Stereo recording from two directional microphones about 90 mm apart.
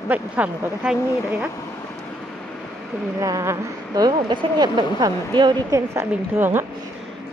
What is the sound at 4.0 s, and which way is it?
Speech, 55° right (ahead or behind).